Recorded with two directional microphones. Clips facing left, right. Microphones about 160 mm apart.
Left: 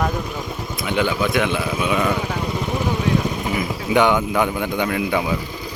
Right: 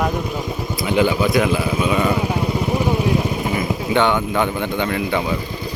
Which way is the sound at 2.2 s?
15° right (ahead or behind).